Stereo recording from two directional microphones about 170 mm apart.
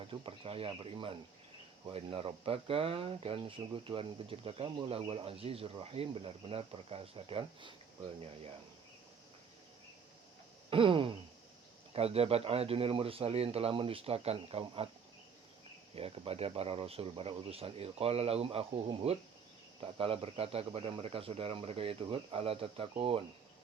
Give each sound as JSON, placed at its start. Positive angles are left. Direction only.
{"t": 0.1, "sound": "speech", "side_deg": -35}
{"t": 10.7, "sound": "speech", "side_deg": -30}
{"t": 16.0, "sound": "speech", "side_deg": -35}